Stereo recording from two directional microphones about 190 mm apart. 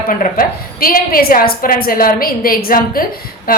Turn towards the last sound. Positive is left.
turn(degrees=50)  # may be behind; listen again after turning